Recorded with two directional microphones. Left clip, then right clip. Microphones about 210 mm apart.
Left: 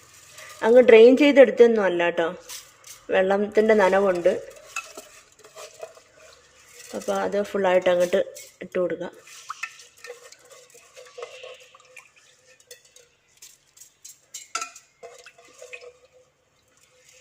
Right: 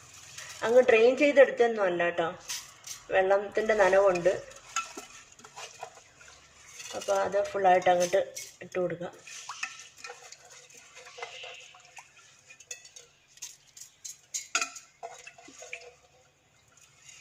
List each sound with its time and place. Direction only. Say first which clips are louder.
0.6 s speech: left 9 dB; 45° left (ahead or behind)
7.2 s speech: left 4 dB; 50° left (ahead or behind)